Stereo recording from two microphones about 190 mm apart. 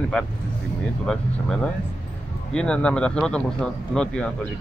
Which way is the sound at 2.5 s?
5° left (ahead or behind).